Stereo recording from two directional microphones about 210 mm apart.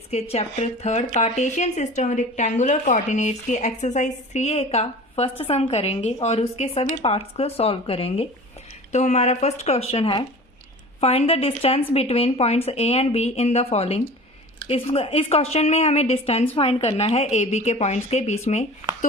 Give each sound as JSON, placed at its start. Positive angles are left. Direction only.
{"t": 0.1, "sound": "a woman's voice", "side_deg": 30}